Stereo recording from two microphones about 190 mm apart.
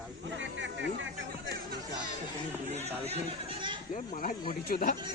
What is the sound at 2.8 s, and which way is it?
Speech, 35° right (ahead or behind).